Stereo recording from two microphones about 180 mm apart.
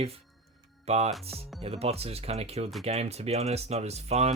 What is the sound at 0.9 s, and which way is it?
Speech, 35° right (ahead or behind).